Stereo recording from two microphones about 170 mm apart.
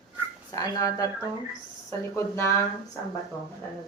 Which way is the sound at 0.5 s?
20° left (ahead or behind).